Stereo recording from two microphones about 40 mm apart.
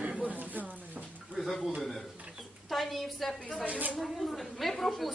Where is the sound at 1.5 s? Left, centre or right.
Centre.